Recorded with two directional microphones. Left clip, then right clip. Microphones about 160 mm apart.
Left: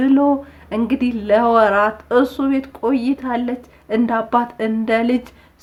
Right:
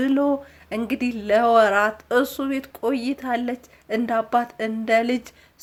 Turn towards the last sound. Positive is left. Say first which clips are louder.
# left 2 dB
turn(degrees=-20)  # may be behind; listen again after turning